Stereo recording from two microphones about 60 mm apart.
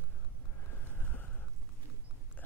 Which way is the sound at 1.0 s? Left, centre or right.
Left.